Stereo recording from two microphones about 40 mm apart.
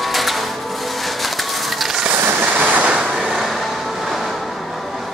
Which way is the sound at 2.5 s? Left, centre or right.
Right.